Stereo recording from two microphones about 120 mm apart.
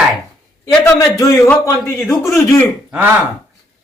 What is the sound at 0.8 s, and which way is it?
A man's voice, 25° left (ahead or behind).